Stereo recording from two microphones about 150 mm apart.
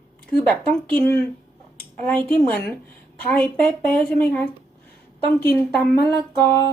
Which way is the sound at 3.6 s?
10° left (ahead or behind).